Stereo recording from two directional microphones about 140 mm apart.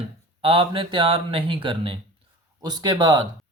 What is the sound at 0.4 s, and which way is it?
Speech, 40° right (ahead or behind).